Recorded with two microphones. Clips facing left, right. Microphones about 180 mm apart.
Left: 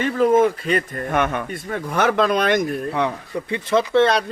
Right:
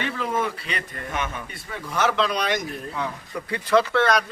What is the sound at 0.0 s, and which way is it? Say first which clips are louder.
A man's voice: left 10 dB; 45° left (ahead or behind).